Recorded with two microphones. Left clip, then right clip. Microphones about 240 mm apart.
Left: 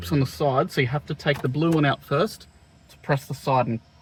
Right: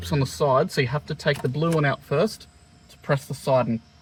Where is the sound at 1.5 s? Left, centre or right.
Left.